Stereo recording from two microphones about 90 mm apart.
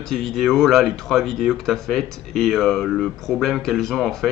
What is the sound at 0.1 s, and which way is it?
Speech, 5° left (ahead or behind).